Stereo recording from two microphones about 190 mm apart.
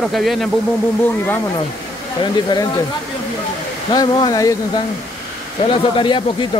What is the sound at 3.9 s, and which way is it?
Speech, 20° left (ahead or behind).